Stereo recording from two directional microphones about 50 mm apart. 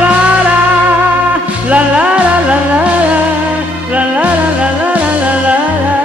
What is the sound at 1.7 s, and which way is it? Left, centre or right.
Music, right.